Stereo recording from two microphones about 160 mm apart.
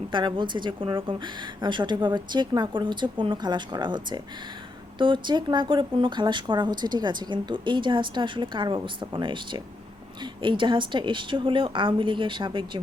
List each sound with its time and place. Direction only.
0.1 s a woman's voice: 30° right (ahead or behind)